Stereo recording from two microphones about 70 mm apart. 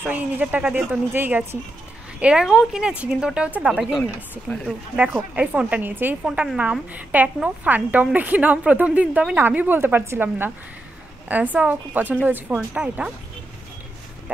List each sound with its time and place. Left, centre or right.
0.0 s speech: right
2.1 s speech: centre
5.0 s speech: right
6.2 s speech: centre
6.9 s speech: right